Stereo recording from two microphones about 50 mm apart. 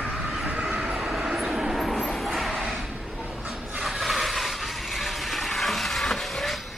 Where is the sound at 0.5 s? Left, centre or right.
Right.